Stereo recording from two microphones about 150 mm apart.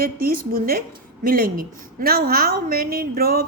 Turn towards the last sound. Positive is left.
turn(degrees=-90)